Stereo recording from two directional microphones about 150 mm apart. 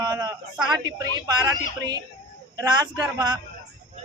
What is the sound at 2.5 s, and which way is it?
Speech, 25° right (ahead or behind).